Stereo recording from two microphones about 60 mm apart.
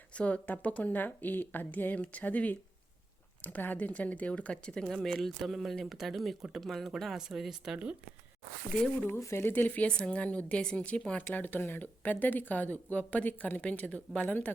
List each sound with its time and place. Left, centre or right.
0.1 s speech: left; by 7.8 s centre
9.0 s speech: left; by 11.0 s centre
11.2 s speech: left